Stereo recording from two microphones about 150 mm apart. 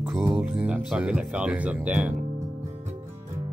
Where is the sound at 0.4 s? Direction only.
5° right (ahead or behind).